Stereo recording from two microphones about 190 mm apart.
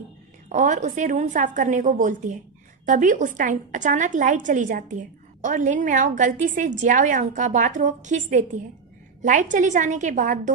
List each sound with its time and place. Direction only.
0.5 s a woman's voice: 40° right (ahead or behind)